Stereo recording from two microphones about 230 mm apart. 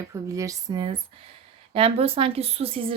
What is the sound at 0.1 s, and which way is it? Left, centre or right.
A woman's voice, centre.